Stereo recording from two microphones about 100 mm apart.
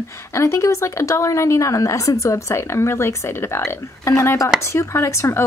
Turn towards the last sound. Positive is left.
turn(degrees=30)  # may be behind; listen again after turning